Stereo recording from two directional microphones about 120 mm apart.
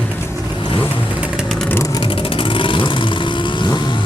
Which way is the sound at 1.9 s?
45° left (ahead or behind).